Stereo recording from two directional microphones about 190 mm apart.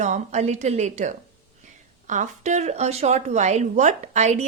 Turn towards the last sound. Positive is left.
turn(degrees=-35)  # may be behind; listen again after turning